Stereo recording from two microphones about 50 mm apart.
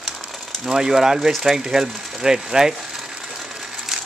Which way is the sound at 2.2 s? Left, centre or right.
Centre.